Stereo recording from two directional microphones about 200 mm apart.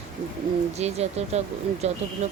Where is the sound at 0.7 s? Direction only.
30° right (ahead or behind).